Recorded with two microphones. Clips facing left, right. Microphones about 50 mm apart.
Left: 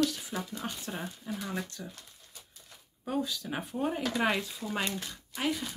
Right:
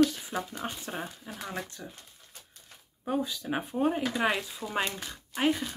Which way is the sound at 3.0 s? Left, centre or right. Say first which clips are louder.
Right 2 dB; centre.